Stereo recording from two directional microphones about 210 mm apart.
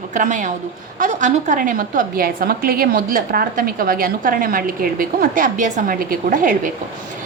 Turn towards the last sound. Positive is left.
turn(degrees=-40)  # may be behind; listen again after turning